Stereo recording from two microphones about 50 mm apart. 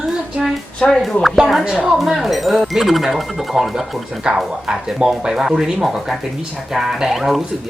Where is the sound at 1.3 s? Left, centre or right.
Centre.